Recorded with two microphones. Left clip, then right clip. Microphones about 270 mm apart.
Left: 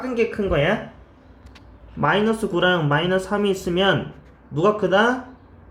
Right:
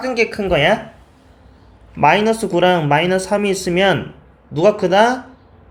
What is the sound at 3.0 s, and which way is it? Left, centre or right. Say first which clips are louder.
Speech: right 4 dB; centre.